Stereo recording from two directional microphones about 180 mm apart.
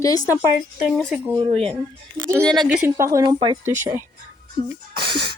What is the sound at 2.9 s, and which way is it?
Speech, 15° right (ahead or behind).